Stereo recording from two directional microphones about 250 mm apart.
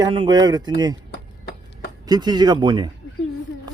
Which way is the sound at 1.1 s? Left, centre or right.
Left.